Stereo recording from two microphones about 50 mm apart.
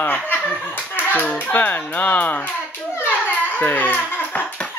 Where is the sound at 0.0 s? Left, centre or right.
Left.